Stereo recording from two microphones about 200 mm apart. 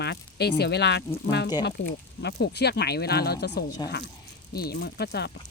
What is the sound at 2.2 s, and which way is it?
Speech, 55° left (ahead or behind).